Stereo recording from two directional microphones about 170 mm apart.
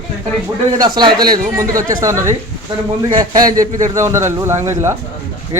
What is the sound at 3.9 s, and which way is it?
Speech, 15° right (ahead or behind).